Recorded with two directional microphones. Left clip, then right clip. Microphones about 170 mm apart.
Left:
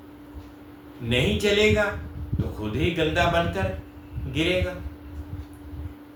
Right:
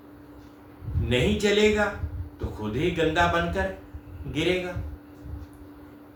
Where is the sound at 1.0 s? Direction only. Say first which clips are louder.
Left 1 dB; 20° right (ahead or behind).